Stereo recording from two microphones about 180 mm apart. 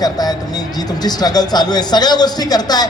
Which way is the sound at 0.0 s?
20° left (ahead or behind).